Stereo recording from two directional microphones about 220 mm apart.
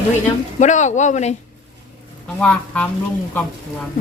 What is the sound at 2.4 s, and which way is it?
Speech, 5° left (ahead or behind).